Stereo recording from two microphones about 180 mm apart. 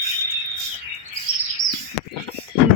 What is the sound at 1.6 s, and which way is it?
Chirp, 25° left (ahead or behind).